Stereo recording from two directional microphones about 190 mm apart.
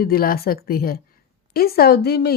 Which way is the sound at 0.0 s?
50° left (ahead or behind).